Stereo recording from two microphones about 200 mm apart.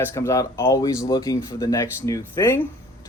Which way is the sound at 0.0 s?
15° left (ahead or behind).